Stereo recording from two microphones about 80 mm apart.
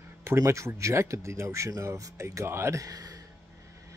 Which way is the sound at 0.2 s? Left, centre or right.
Right.